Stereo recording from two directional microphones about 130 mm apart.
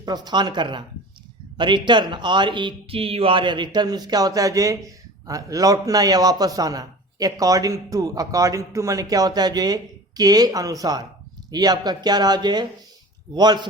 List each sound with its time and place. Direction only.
0.0 s a man's voice: 30° right (ahead or behind)